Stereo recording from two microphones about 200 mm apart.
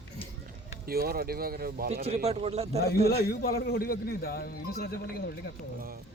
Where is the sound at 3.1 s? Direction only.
50° left (ahead or behind).